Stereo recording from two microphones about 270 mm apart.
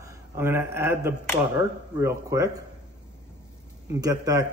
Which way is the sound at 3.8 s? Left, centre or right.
Centre.